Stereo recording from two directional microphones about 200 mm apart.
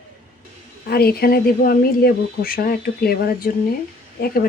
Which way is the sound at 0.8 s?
50° left (ahead or behind).